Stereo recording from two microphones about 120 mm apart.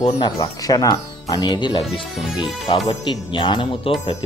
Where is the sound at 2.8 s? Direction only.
40° left (ahead or behind).